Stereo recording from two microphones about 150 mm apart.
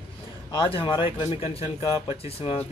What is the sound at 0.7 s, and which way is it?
Speech, 35° left (ahead or behind).